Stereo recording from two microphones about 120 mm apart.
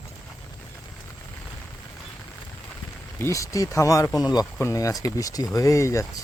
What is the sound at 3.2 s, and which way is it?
Speech, 25° left (ahead or behind).